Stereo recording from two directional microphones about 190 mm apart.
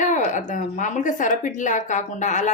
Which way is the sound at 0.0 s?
40° left (ahead or behind).